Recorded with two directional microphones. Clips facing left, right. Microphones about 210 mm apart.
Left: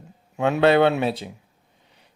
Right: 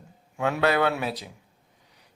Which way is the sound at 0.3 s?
20° left (ahead or behind).